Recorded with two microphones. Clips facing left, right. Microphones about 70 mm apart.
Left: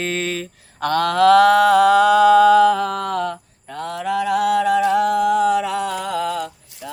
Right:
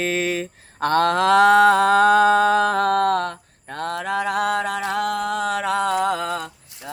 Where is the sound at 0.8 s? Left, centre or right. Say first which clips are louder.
Left 2 dB; right.